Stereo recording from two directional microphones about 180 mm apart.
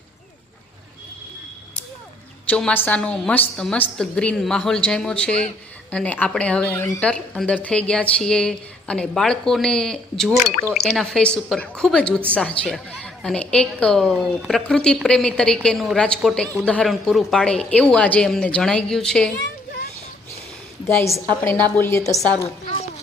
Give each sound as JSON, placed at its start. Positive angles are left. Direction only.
{"t": 2.5, "sound": "a woman's voice", "side_deg": 5}
{"t": 20.8, "sound": "speech", "side_deg": 15}
{"t": 22.6, "sound": "speech", "side_deg": 30}